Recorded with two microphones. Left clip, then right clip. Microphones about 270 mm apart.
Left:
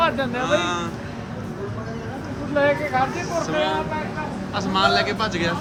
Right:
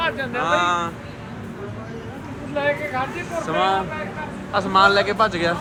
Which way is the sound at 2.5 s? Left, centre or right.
Left.